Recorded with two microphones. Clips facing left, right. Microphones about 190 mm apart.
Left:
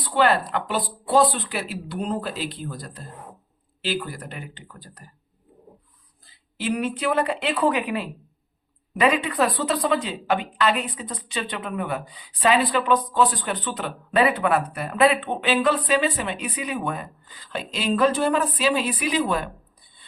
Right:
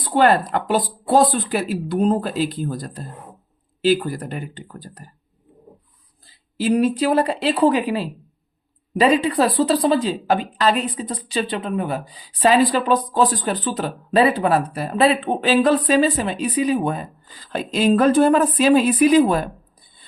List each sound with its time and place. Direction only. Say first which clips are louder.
0.0 s speech: right 4 dB; 45° right (ahead or behind)
6.6 s a woman's voice: right 7 dB; 35° right (ahead or behind)